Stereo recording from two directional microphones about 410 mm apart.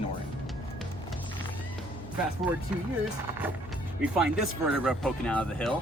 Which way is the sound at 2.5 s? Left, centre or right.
Centre.